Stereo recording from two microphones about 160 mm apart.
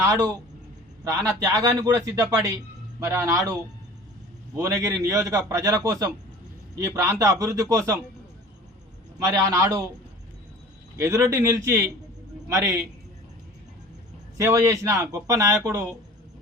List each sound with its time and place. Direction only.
1.0 s a man's voice: 20° right (ahead or behind)
4.5 s a man's voice: 20° right (ahead or behind)
9.1 s a man's voice: 20° right (ahead or behind)
10.9 s a man's voice: 20° right (ahead or behind)
14.3 s a man's voice: 20° right (ahead or behind)